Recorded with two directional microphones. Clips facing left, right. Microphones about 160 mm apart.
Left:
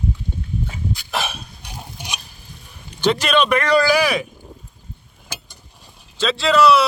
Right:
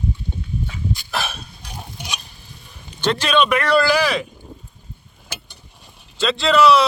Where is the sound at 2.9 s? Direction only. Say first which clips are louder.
Left 1 dB; 10° left (ahead or behind).